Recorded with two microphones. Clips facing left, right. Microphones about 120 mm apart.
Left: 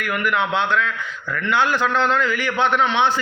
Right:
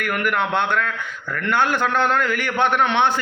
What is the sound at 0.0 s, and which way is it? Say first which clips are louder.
A man's voice: even; 55° right (ahead or behind).